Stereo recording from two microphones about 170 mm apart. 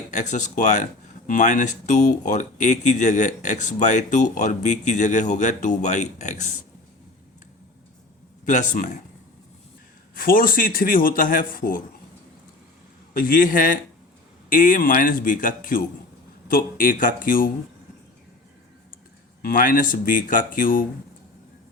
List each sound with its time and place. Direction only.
0.1 s speech: 45° left (ahead or behind)
8.4 s speech: 45° left (ahead or behind)
10.2 s speech: 55° left (ahead or behind)
13.1 s speech: 55° left (ahead or behind)
19.4 s speech: 55° left (ahead or behind)